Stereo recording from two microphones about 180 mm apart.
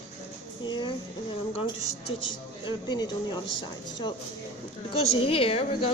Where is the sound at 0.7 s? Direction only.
25° left (ahead or behind).